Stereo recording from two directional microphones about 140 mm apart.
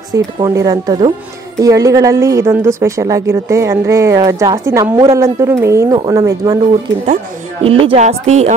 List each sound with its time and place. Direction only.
0.1 s a woman's voice: 25° right (ahead or behind)
7.6 s speech: 40° right (ahead or behind)
8.0 s speech: 55° right (ahead or behind)